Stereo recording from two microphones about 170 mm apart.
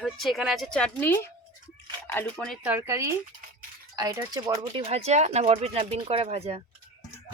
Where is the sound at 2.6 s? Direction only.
15° right (ahead or behind).